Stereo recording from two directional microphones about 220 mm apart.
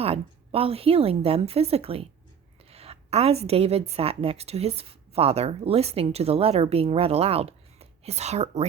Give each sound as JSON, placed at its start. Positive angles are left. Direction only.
{"t": 0.0, "sound": "a woman's voice", "side_deg": -25}